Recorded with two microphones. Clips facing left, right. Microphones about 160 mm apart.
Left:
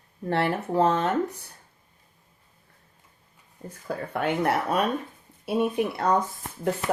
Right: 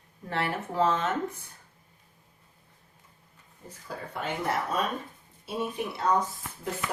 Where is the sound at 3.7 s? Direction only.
60° left (ahead or behind).